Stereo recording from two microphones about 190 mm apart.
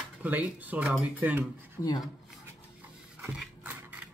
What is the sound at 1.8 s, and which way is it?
Speech, 20° left (ahead or behind).